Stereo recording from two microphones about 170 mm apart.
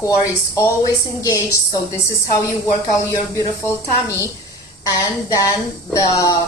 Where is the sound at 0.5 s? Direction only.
20° left (ahead or behind).